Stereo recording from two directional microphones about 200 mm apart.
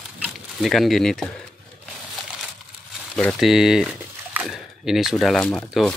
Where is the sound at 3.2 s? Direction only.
Centre (ahead or behind).